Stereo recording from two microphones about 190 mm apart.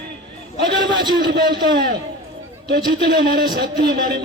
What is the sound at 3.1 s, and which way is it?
Speech, 55° right (ahead or behind).